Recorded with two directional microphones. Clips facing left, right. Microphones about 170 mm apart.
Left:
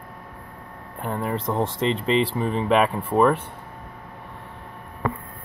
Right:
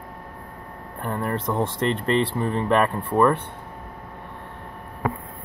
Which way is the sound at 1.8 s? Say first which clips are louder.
Left 1 dB; 90° left.